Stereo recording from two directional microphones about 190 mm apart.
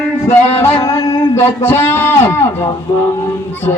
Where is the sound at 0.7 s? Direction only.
15° left (ahead or behind).